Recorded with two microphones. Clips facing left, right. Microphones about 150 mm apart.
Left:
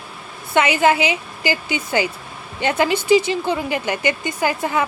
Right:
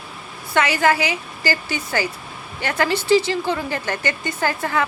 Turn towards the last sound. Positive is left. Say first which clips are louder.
# left 2 dB
turn(degrees=20)  # may be behind; listen again after turning